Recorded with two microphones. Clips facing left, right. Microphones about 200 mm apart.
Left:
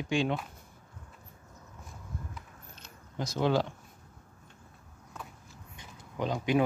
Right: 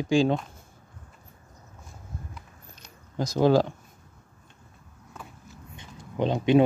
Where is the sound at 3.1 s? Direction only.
40° right (ahead or behind).